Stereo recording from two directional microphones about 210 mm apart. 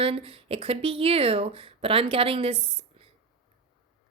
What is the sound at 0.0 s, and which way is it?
Speech, 25° right (ahead or behind).